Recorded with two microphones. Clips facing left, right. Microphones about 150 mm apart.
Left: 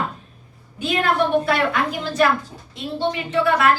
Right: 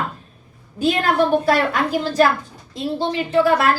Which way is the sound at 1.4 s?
40° right (ahead or behind).